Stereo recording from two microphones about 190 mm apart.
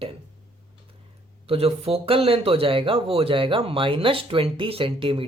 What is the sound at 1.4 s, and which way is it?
Speech, 30° right (ahead or behind).